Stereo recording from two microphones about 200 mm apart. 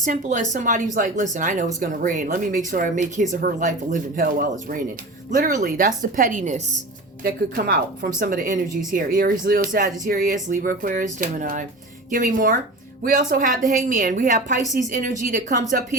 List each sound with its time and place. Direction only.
0.0 s speech: 40° right (ahead or behind)